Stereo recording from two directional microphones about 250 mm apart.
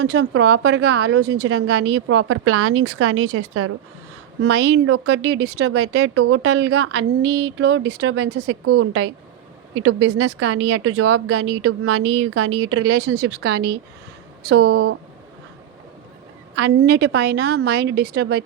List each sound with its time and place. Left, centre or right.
0.0 s a woman's voice: right
4.4 s speech: right
8.6 s a woman's voice: right
10.2 s a woman's voice: right
10.6 s speech: right
10.9 s a woman's voice: right
13.1 s a woman's voice: right
16.6 s a woman's voice: right